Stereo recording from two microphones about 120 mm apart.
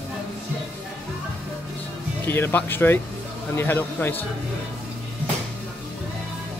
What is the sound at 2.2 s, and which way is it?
Speech, 20° left (ahead or behind).